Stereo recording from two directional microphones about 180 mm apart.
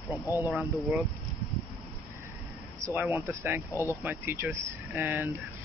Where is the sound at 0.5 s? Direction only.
5° right (ahead or behind).